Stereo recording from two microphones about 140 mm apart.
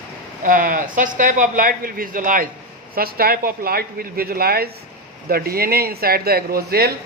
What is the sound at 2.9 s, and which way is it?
Speech, 90° right.